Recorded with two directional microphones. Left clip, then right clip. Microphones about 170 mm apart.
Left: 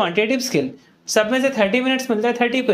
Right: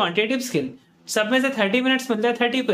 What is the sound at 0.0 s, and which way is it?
A man's voice, 10° left (ahead or behind).